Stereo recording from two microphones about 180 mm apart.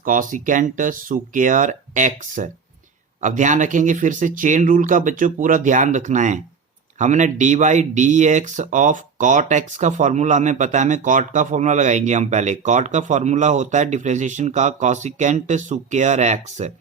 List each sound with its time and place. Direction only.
0.0 s speech: 45° right (ahead or behind)